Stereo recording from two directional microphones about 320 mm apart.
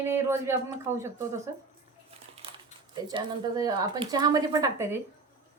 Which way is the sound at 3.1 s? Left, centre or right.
Centre.